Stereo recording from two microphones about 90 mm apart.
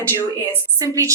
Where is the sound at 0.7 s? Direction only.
35° right (ahead or behind).